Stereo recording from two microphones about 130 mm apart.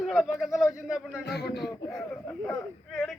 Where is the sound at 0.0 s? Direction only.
5° right (ahead or behind).